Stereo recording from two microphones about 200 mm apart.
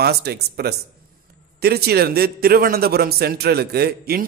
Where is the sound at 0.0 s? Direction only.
50° right (ahead or behind).